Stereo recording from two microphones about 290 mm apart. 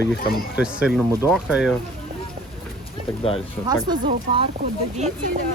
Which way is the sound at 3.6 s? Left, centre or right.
Centre.